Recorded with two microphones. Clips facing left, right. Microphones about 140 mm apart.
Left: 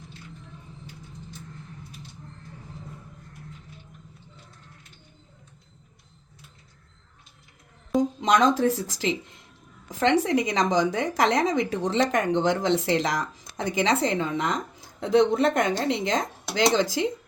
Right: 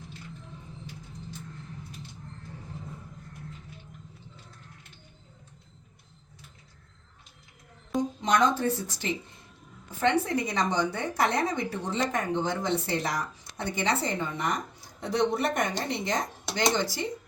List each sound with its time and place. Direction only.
8.2 s a woman's voice: 90° left